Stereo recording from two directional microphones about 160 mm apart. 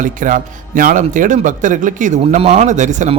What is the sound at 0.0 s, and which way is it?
A man's voice, 55° right (ahead or behind).